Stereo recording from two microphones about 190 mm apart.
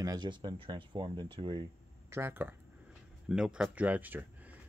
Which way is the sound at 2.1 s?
10° right (ahead or behind).